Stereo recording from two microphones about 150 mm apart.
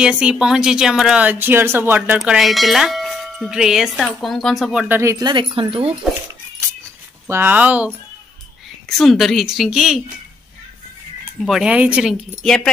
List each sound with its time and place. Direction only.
0.0 s speech: 5° right (ahead or behind)
4.8 s speech: 15° right (ahead or behind)
5.2 s speech: 30° right (ahead or behind)
7.2 s speech: 15° right (ahead or behind)
8.8 s speech: centre (ahead or behind)
11.4 s speech: 5° right (ahead or behind)